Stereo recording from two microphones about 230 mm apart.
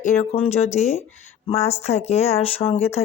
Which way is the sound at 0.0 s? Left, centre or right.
Left.